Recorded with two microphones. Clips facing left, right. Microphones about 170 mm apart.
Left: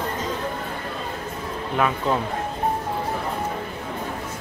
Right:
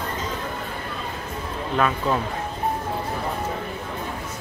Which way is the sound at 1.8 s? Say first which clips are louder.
Even; 15° left (ahead or behind).